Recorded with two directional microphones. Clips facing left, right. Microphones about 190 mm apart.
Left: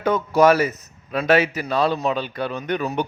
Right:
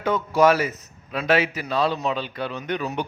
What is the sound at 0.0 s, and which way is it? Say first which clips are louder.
A man's voice: left 2 dB; 45° left (ahead or behind).